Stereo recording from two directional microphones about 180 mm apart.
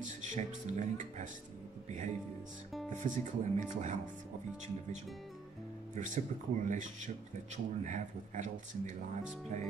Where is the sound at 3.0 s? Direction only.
45° right (ahead or behind).